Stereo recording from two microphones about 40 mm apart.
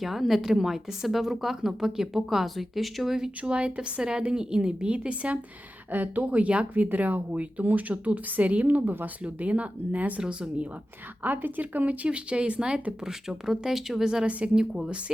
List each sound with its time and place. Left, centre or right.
0.0 s a woman's voice: centre
3.2 s speech: right
5.9 s speech: right
6.7 s speech: right
9.2 s speech: right
10.2 s speech: right
11.2 s speech: right
12.0 s speech: right
13.1 s speech: centre
14.3 s speech: right
14.5 s speech: centre